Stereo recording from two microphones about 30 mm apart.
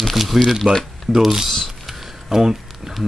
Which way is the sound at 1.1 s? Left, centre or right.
Centre.